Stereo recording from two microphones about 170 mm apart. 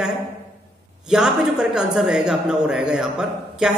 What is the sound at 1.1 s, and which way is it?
A woman's voice, 5° right (ahead or behind).